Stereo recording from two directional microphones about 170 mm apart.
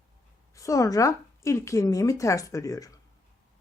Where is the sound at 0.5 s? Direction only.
20° left (ahead or behind).